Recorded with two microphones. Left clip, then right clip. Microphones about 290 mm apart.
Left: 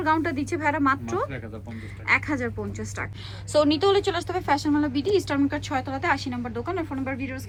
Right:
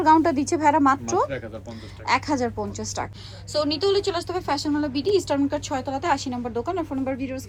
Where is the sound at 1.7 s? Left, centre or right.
Centre.